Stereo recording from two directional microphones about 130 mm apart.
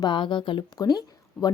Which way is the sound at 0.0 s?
40° left (ahead or behind).